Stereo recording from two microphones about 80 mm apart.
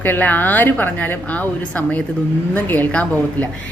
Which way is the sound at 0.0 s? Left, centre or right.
Left.